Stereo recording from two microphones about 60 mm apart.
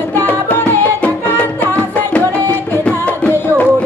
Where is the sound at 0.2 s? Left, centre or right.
Left.